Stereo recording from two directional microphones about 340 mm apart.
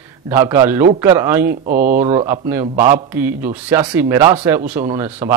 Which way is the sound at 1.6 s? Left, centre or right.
Right.